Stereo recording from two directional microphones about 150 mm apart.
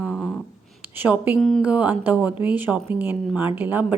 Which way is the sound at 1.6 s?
10° right (ahead or behind).